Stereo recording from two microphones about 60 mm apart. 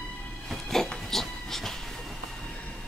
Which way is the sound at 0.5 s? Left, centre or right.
Centre.